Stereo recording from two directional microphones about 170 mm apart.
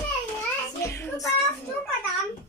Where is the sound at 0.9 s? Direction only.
15° left (ahead or behind).